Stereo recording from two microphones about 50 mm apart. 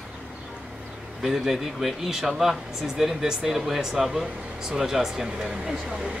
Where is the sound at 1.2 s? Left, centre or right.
Centre.